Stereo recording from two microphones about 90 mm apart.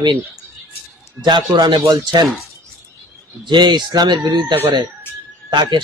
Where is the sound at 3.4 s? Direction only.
55° right (ahead or behind).